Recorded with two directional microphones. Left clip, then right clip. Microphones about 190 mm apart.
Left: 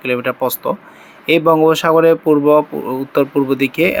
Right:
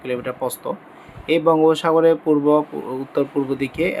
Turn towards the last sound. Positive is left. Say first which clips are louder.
# left 7 dB
turn(degrees=15)  # may be behind; listen again after turning